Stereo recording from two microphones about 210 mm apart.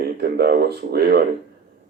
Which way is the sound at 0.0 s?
50° right (ahead or behind).